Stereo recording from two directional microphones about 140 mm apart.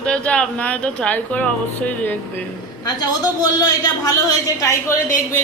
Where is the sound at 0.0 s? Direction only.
5° left (ahead or behind).